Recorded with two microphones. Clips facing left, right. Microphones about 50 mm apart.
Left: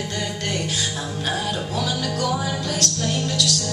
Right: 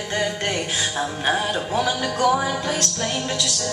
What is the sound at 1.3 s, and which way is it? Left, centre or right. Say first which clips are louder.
Music: right 3 dB; right.